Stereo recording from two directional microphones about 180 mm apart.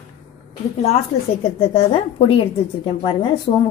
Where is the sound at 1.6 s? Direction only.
30° left (ahead or behind).